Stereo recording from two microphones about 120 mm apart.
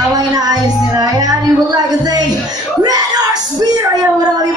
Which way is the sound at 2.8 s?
35° right (ahead or behind).